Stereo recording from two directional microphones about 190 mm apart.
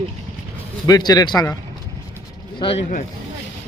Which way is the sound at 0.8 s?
20° left (ahead or behind).